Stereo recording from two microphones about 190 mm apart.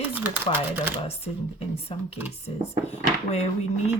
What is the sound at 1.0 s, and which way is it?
Speech, 30° left (ahead or behind).